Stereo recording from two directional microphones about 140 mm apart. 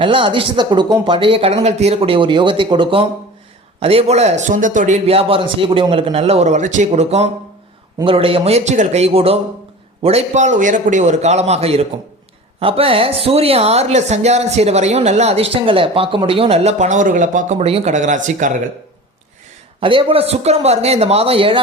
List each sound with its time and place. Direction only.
0.0 s speech: 40° right (ahead or behind); by 4.9 s 65° right (ahead or behind)
5.0 s speech: 45° right (ahead or behind)
8.0 s speech: 40° right (ahead or behind)
17.9 s speech: 60° right (ahead or behind)
19.8 s speech: 40° right (ahead or behind)